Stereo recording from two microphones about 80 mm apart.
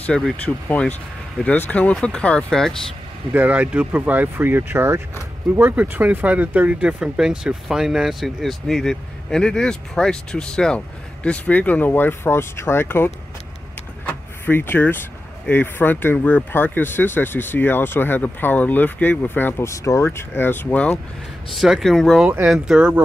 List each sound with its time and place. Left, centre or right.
0.1 s speech: centre
0.7 s speech: centre
3.3 s speech: centre; by 13.1 s left
14.0 s power windows: left
15.5 s speech: left
19.6 s speech: left
20.1 s speech: left
21.5 s speech: centre
22.5 s speech: centre